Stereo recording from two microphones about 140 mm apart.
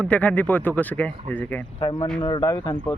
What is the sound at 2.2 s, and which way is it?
Speech, 30° left (ahead or behind).